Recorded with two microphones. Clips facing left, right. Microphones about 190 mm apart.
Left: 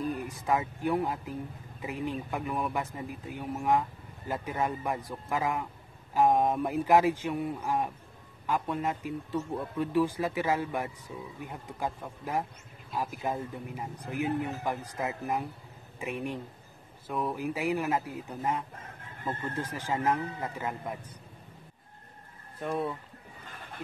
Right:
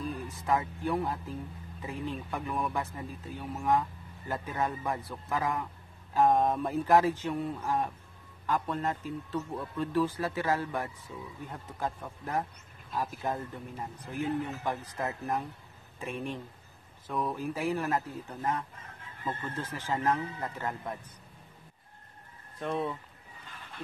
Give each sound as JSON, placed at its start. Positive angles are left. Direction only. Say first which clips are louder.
{"t": 0.1, "sound": "a sound", "louder": "left 1 dB", "side_deg": 15}
{"t": 0.8, "sound": "speech", "louder": "left 2 dB", "side_deg": 15}
{"t": 22.6, "sound": "speech", "louder": "left 1 dB", "side_deg": 0}